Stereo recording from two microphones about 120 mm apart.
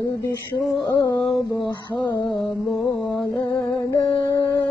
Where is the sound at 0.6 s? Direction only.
Centre (ahead or behind).